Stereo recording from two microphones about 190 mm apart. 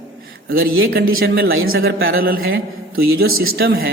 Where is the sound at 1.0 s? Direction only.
75° right (ahead or behind); by 1.7 s 90° right.